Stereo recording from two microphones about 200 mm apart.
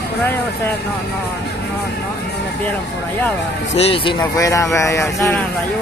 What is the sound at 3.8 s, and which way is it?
A man's voice, 30° left (ahead or behind).